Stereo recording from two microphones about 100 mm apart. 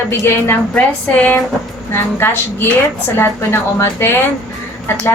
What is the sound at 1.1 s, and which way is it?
Speech, 15° left (ahead or behind).